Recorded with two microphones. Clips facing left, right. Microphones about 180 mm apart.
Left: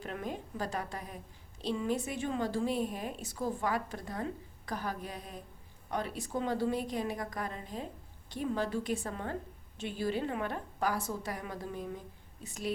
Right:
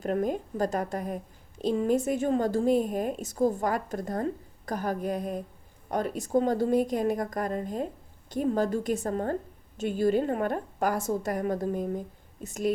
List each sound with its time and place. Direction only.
0.0 s a woman's voice: 45° right (ahead or behind)